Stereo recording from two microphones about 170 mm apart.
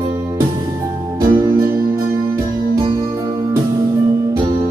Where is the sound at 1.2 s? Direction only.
20° right (ahead or behind).